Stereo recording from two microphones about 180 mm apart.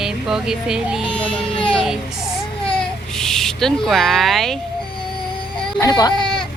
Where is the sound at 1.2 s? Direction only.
30° left (ahead or behind).